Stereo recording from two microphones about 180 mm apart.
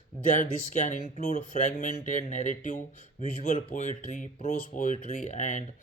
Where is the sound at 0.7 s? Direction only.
40° left (ahead or behind).